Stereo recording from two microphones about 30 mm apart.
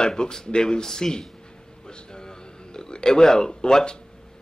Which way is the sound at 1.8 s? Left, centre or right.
Left.